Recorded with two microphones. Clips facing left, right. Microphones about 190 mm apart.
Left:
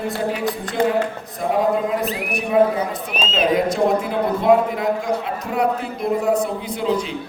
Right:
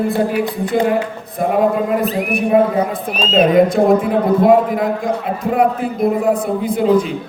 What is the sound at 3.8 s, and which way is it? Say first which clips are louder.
A man's voice: right 6 dB; 50° right (ahead or behind).